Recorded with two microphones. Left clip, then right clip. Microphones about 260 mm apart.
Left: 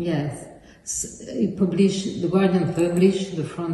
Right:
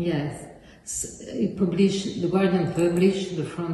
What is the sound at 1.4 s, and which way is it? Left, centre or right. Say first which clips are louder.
A man's voice: left 2 dB; centre.